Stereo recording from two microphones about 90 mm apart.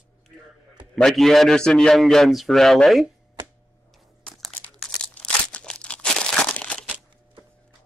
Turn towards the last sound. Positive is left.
turn(degrees=10)  # may be behind; listen again after turning